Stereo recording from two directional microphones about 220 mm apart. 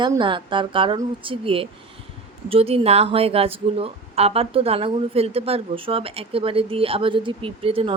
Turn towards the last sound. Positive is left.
turn(degrees=-25)  # may be behind; listen again after turning